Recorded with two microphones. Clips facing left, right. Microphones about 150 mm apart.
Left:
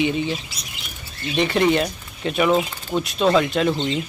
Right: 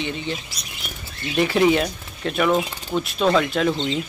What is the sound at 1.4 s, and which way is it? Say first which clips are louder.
Speech: right 1 dB; centre (ahead or behind).